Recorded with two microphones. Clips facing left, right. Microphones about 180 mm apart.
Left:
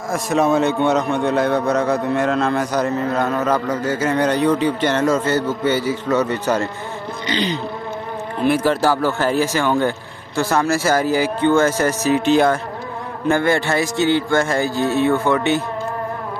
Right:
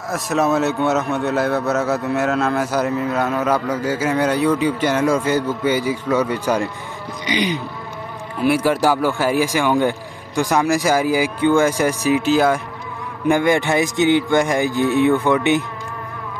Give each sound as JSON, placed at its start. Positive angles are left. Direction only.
{"t": 0.1, "sound": "a man's voice", "side_deg": 0}